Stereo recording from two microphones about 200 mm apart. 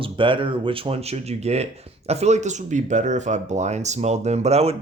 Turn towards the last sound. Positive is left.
turn(degrees=-30)  # may be behind; listen again after turning